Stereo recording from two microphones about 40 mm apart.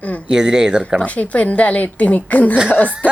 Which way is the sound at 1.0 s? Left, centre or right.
Left.